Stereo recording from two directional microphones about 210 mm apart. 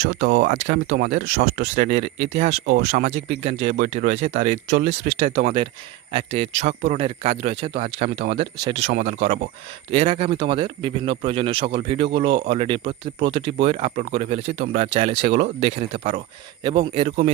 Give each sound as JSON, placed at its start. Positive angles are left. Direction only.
{"t": 0.0, "sound": "speech", "side_deg": -50}
{"t": 0.4, "sound": "speech", "side_deg": -35}